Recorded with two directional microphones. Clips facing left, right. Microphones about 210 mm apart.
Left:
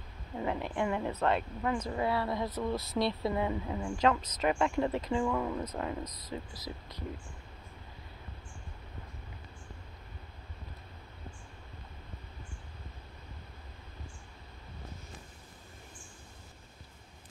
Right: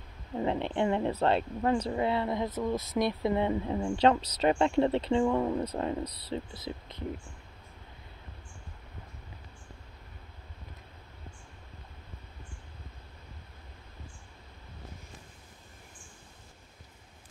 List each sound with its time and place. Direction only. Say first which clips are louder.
0.4 s speech: right 4 dB; 25° right (ahead or behind)